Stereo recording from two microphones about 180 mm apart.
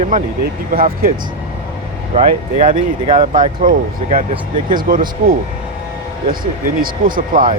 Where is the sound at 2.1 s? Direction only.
45° right (ahead or behind).